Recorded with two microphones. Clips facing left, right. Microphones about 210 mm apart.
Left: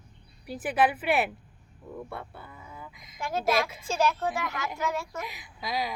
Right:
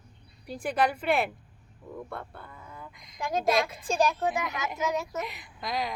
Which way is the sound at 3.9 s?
15° right (ahead or behind).